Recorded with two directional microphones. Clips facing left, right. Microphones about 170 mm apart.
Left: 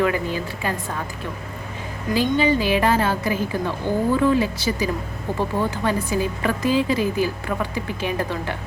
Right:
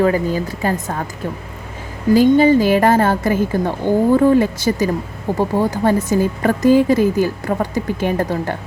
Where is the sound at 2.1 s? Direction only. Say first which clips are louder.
Right 8 dB; 45° right (ahead or behind).